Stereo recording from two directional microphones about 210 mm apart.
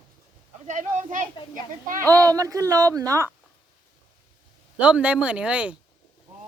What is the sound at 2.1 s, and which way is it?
Speech, 15° right (ahead or behind).